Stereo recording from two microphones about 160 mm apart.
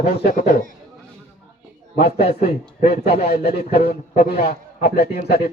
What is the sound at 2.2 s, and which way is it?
Speech, 40° left (ahead or behind).